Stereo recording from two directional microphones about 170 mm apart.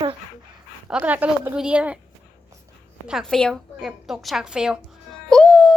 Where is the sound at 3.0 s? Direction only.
Centre (ahead or behind).